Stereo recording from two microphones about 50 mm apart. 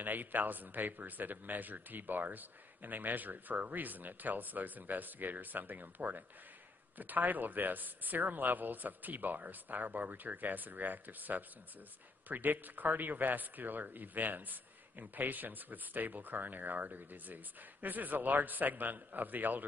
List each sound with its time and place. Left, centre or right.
0.0 s speech: right